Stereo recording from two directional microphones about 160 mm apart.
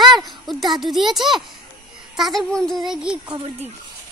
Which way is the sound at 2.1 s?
Centre (ahead or behind).